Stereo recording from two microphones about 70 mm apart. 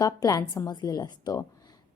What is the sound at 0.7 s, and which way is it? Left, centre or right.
Speech, left.